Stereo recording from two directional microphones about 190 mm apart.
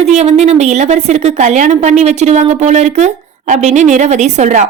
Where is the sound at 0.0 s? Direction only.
35° right (ahead or behind).